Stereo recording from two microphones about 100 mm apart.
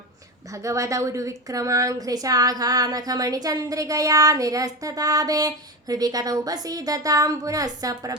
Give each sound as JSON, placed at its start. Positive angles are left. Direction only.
{"t": 0.5, "sound": "a woman's voice", "side_deg": -30}